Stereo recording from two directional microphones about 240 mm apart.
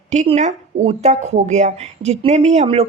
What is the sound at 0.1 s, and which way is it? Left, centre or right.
A woman's voice, right.